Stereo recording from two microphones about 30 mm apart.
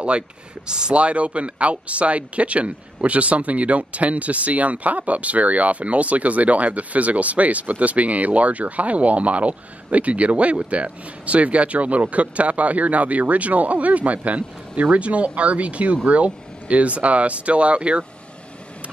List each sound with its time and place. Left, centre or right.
0.7 s speech: right
0.9 s speech: right